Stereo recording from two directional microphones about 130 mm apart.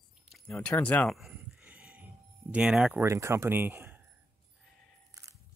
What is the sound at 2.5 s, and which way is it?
Speech, 5° right (ahead or behind).